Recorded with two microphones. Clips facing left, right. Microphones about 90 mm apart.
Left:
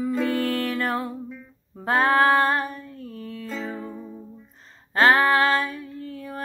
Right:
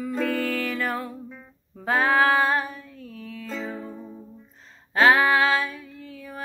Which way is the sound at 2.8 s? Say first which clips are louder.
Left 3 dB; 50° left (ahead or behind).